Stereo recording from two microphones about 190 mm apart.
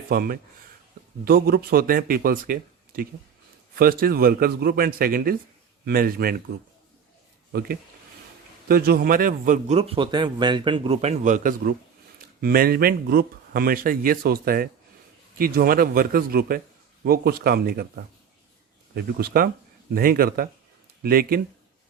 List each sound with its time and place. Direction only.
0.1 s speech: 50° right (ahead or behind)
7.5 s a man's voice: 55° right (ahead or behind)